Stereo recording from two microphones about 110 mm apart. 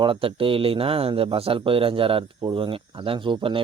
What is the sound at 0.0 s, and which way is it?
Speech, 55° right (ahead or behind).